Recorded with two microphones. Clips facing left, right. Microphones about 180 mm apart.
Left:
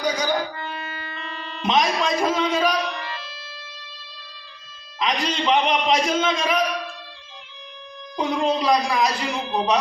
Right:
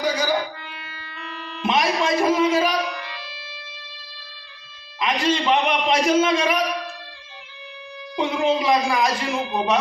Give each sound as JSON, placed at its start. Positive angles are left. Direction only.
{"t": 0.0, "sound": "music", "side_deg": 0}
{"t": 0.5, "sound": "music", "side_deg": 45}
{"t": 1.6, "sound": "music", "side_deg": -5}
{"t": 5.0, "sound": "speech", "side_deg": -5}
{"t": 8.1, "sound": "speech", "side_deg": 0}